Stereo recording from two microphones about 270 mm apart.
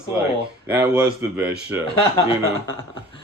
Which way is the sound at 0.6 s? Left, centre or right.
Centre.